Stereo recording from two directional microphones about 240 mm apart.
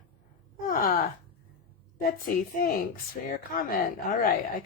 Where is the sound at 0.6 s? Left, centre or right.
Left.